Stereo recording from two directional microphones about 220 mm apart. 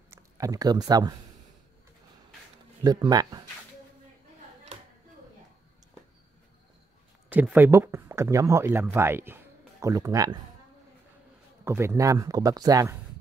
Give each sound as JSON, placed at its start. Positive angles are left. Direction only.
{"t": 0.1, "sound": "speech", "side_deg": -15}
{"t": 2.8, "sound": "speech", "side_deg": -15}
{"t": 7.2, "sound": "speech", "side_deg": -5}
{"t": 11.6, "sound": "speech", "side_deg": -10}